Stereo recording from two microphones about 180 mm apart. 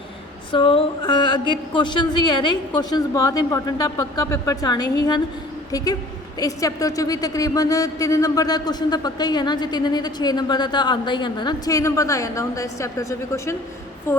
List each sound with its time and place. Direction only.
0.5 s a woman's voice: 30° left (ahead or behind)